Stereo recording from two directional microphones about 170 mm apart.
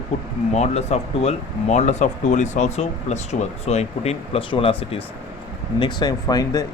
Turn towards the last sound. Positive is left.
turn(degrees=20)  # may be behind; listen again after turning